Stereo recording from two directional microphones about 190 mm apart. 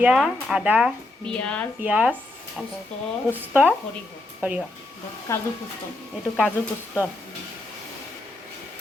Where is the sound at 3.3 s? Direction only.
10° right (ahead or behind).